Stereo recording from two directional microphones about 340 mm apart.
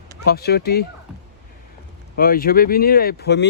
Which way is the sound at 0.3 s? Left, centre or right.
Left.